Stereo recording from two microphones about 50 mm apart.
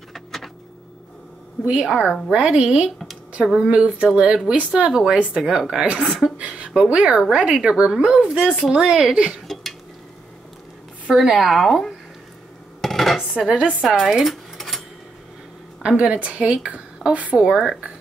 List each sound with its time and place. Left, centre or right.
0.1 s power windows: centre
1.6 s a woman's voice: right
1.9 s a woman's voice: centre
6.3 s a sound: right
6.7 s a woman's voice: centre
9.5 s a sound: centre
11.1 s speech: centre
12.8 s dishes: centre
13.5 s a woman's voice: right
13.8 s speech: centre
16.0 s a woman's voice: right
17.4 s speech: centre